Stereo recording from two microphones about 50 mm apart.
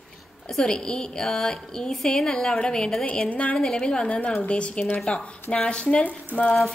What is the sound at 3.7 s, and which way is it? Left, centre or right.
A woman's voice, centre.